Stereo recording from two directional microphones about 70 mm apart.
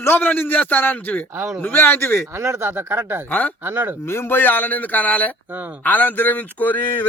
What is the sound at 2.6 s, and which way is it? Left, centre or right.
Speech, right.